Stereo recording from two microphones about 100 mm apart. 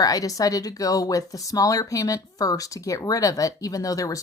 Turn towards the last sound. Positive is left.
turn(degrees=35)  # may be behind; listen again after turning